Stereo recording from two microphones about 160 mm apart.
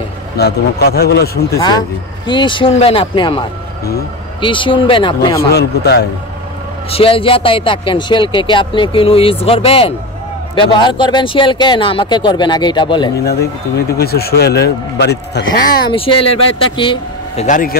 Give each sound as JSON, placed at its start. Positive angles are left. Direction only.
{"t": 0.4, "sound": "a man's voice", "side_deg": 85}
{"t": 1.6, "sound": "speech", "side_deg": 25}
{"t": 5.5, "sound": "a man's voice", "side_deg": 85}
{"t": 6.9, "sound": "speech", "side_deg": 35}
{"t": 13.9, "sound": "a man's voice", "side_deg": 75}
{"t": 15.9, "sound": "speech", "side_deg": 35}
{"t": 17.5, "sound": "a man's voice", "side_deg": 60}